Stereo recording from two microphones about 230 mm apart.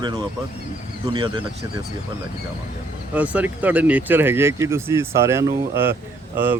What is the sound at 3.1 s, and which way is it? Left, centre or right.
Speech, centre.